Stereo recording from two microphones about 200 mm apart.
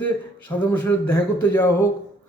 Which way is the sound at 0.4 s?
10° left (ahead or behind).